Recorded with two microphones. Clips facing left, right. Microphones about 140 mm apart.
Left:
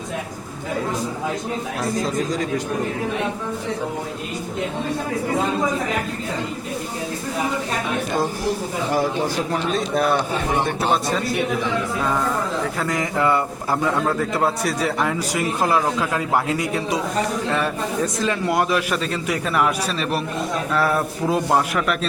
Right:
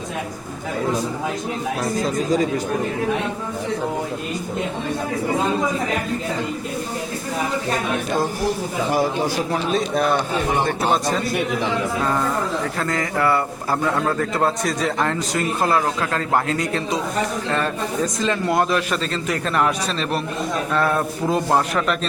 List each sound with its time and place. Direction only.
8.9 s a man's voice: 10° right (ahead or behind)
12.8 s a man's voice: 15° left (ahead or behind)